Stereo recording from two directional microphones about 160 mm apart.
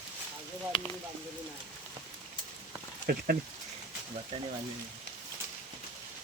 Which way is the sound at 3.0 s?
65° right (ahead or behind).